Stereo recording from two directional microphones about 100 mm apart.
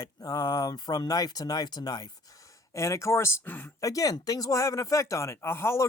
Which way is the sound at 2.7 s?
30° left (ahead or behind).